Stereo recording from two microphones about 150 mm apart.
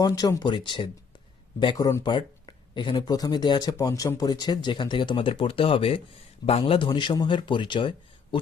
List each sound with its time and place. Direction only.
0.0 s a man's voice: 25° left (ahead or behind)